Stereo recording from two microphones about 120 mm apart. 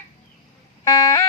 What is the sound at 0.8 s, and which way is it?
Music, 30° left (ahead or behind).